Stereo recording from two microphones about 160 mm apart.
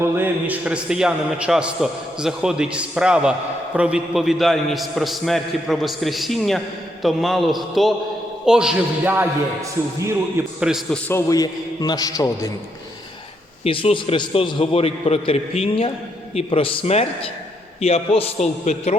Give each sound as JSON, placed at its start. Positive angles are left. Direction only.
{"t": 0.0, "sound": "a man's voice", "side_deg": -10}
{"t": 10.3, "sound": "a man's voice", "side_deg": -5}
{"t": 11.1, "sound": "a man's voice", "side_deg": 20}
{"t": 13.7, "sound": "a man's voice", "side_deg": 35}